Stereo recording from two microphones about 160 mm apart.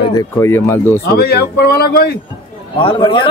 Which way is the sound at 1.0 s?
80° left.